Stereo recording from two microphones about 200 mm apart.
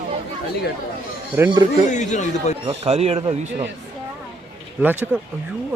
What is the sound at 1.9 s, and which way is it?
Speech, 35° left (ahead or behind).